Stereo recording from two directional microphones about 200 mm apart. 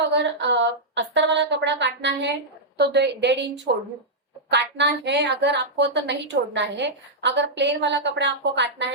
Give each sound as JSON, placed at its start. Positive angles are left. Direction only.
{"t": 0.1, "sound": "a woman's voice", "side_deg": -60}
{"t": 4.5, "sound": "a woman's voice", "side_deg": -60}